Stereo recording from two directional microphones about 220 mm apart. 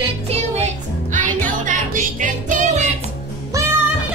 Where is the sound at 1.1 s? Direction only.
35° right (ahead or behind).